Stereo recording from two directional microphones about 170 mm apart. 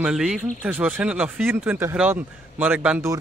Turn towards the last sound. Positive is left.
turn(degrees=-10)  # may be behind; listen again after turning